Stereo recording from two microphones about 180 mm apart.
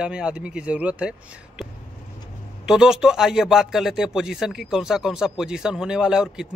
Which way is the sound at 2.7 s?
5° right (ahead or behind).